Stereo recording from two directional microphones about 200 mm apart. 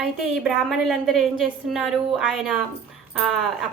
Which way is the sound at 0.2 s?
Centre (ahead or behind).